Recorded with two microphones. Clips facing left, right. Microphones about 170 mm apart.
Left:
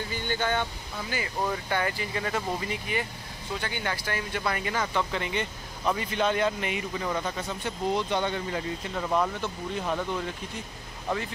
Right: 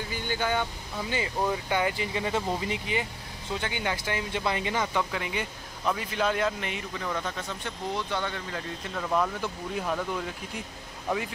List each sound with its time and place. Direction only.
0.1 s speech: 10° right (ahead or behind)
5.1 s a man's voice: 5° right (ahead or behind)
7.9 s speech: 20° left (ahead or behind)
8.9 s speech: 10° left (ahead or behind)
9.4 s a man's voice: centre (ahead or behind)